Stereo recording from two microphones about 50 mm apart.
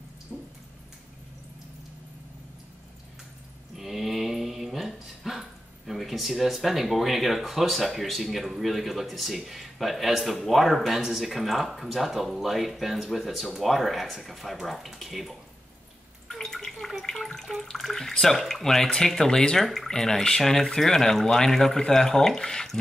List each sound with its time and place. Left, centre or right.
0.3 s water: right
3.7 s speech: centre
16.3 s a sound: centre
17.1 s speech: centre